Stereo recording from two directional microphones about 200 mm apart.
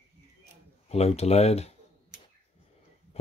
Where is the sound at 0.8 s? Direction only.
30° left (ahead or behind).